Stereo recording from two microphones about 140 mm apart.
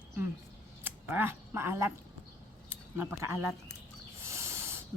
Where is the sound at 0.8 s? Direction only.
15° right (ahead or behind).